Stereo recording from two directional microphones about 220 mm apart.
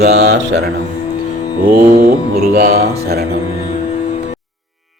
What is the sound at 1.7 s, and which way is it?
Speech, 45° right (ahead or behind).